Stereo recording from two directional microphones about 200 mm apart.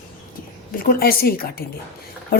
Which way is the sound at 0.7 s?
50° left (ahead or behind).